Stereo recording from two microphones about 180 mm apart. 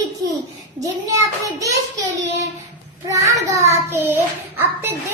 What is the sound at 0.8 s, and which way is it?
Speech, 20° right (ahead or behind).